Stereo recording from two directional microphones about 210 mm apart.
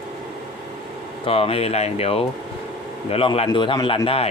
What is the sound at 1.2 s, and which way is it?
Speech, 25° left (ahead or behind).